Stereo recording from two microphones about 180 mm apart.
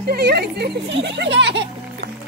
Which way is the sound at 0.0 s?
65° right (ahead or behind).